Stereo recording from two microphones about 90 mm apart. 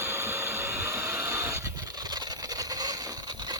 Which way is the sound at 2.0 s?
50° right (ahead or behind).